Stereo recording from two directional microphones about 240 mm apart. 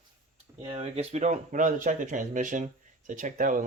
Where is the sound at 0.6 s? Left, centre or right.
Right.